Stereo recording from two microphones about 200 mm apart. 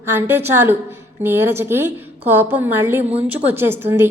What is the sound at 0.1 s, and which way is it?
A woman's voice, 10° right (ahead or behind).